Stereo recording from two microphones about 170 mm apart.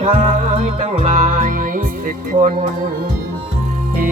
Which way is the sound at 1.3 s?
50° right (ahead or behind).